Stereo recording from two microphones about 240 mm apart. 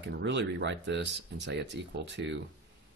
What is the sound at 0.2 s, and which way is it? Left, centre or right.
Speech, right.